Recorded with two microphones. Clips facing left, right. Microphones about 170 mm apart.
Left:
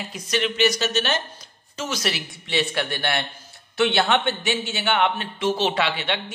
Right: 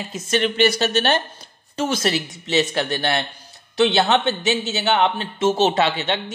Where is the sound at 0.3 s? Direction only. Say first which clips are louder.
Right 3 dB; 55° right (ahead or behind).